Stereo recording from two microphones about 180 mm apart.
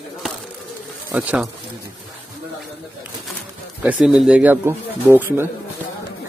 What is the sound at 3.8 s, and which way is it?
Speech, 5° right (ahead or behind).